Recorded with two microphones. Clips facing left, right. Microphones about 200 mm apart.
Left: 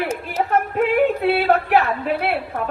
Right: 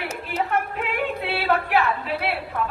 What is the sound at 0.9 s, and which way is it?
A woman's voice, 40° left (ahead or behind).